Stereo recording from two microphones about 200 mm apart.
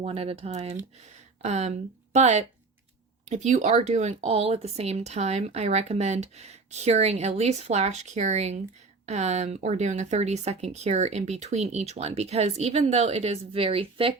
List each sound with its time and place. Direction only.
0.0 s speech: 30° right (ahead or behind)